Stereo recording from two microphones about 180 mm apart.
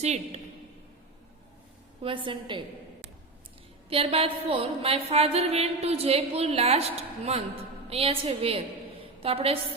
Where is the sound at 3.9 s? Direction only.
30° right (ahead or behind).